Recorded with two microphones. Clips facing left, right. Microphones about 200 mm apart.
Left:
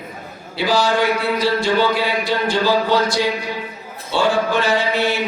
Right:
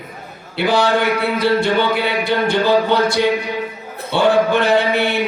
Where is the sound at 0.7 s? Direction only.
60° right (ahead or behind).